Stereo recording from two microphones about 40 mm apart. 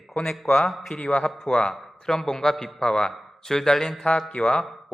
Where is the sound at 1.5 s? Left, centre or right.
Left.